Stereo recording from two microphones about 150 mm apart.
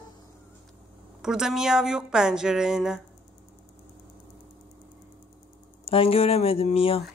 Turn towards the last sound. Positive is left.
turn(degrees=40)  # may be behind; listen again after turning